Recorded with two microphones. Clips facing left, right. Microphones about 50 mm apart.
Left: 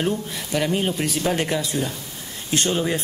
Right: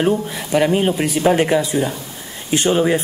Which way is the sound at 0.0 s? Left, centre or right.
Centre.